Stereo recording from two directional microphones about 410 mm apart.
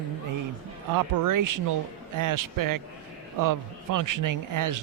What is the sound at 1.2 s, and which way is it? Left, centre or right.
Speech, right.